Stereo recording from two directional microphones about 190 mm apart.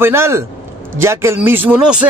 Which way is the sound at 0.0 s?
15° right (ahead or behind).